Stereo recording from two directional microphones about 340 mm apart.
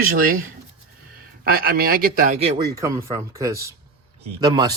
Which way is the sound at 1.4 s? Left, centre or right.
Right.